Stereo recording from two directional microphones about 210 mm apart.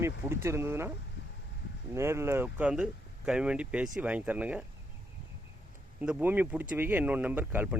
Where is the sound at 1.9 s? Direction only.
10° right (ahead or behind).